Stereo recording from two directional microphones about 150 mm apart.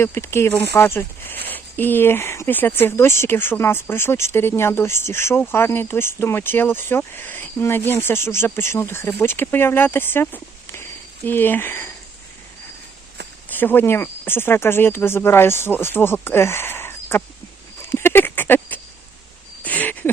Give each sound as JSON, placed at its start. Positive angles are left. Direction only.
{"t": 0.0, "sound": "speech", "side_deg": 15}
{"t": 13.5, "sound": "speech", "side_deg": 10}
{"t": 17.8, "sound": "a sound", "side_deg": 15}